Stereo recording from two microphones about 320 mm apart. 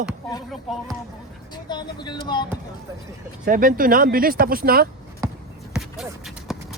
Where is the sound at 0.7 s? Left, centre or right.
Centre.